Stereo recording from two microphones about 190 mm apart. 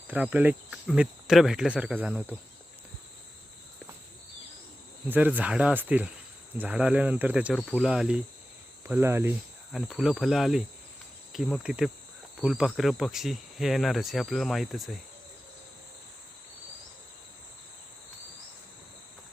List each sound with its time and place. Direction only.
0.1 s speech: 10° right (ahead or behind)
5.0 s speech: 10° right (ahead or behind)
9.7 s speech: centre (ahead or behind)